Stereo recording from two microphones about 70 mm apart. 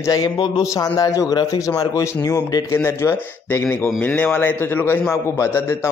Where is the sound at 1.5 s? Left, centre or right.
Left.